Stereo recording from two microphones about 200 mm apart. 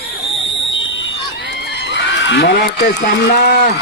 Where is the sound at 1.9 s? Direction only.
65° left (ahead or behind).